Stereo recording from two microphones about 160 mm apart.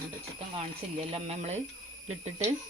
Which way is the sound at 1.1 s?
40° right (ahead or behind).